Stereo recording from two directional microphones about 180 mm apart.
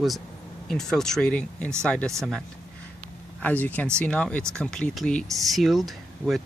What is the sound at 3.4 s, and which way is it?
Speech, 10° left (ahead or behind).